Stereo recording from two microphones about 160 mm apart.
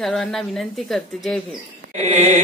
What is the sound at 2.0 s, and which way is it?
Mantra, 45° right (ahead or behind).